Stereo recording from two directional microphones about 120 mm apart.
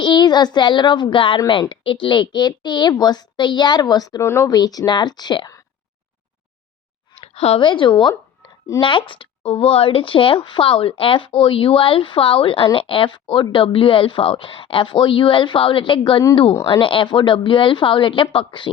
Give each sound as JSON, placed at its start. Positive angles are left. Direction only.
{"t": 0.0, "sound": "a woman's voice", "side_deg": 40}
{"t": 7.2, "sound": "a sound", "side_deg": 60}
{"t": 7.6, "sound": "speech", "side_deg": 45}